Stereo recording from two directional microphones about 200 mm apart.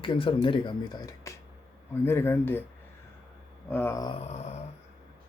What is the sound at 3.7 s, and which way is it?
Speech, 10° left (ahead or behind).